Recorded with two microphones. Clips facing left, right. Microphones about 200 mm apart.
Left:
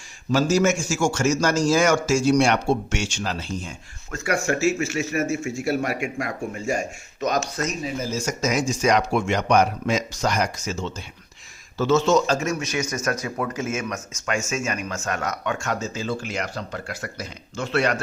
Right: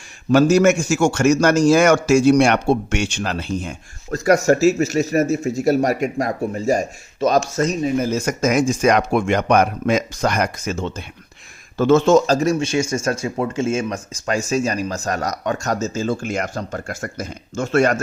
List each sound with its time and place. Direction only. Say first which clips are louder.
0.3 s a man's voice: right 6 dB; 60° right (ahead or behind)
4.1 s speech: right 9 dB; 40° right (ahead or behind)
7.9 s a man's voice: right 7 dB; 60° right (ahead or behind)
12.2 s speech: right 6 dB; 35° right (ahead or behind)